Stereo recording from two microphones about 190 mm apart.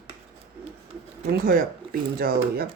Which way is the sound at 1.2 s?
55° right (ahead or behind).